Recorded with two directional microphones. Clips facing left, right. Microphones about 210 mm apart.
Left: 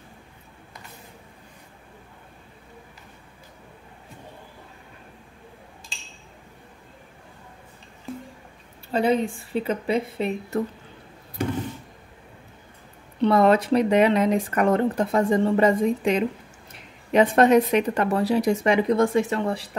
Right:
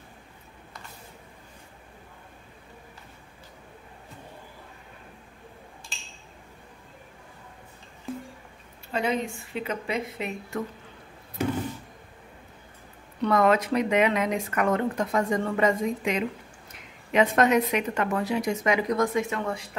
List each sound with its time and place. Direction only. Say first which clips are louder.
8.9 s speech: left 6 dB; 30° left (ahead or behind)
13.2 s speech: left 4 dB; 30° left (ahead or behind)